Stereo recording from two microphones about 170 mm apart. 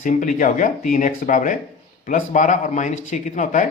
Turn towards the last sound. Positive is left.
turn(degrees=45)  # may be behind; listen again after turning